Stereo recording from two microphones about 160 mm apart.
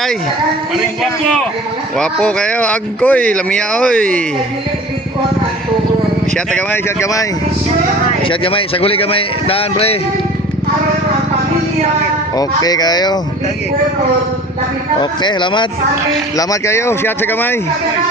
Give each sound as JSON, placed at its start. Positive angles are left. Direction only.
{"t": 2.0, "sound": "speech", "side_deg": 5}
{"t": 6.5, "sound": "speech", "side_deg": 15}
{"t": 8.3, "sound": "speech", "side_deg": 35}
{"t": 12.4, "sound": "speech", "side_deg": 25}
{"t": 15.2, "sound": "speech", "side_deg": 30}